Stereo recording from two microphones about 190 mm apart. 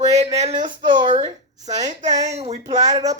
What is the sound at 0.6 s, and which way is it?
Speech, 25° right (ahead or behind).